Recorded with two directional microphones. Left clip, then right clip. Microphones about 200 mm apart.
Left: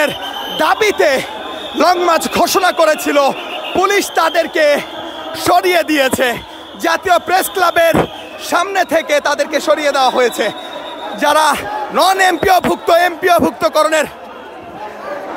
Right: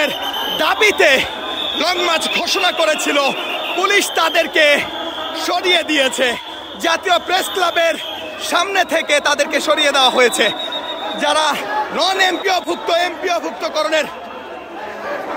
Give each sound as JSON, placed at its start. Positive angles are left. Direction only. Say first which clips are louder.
{"t": 0.6, "sound": "a man's voice", "louder": "left 2 dB", "side_deg": 15}
{"t": 1.8, "sound": "a man's voice", "louder": "left 6 dB", "side_deg": 25}
{"t": 5.4, "sound": "a man's voice", "louder": "left 5 dB", "side_deg": 30}
{"t": 11.1, "sound": "speech", "louder": "left 5 dB", "side_deg": 25}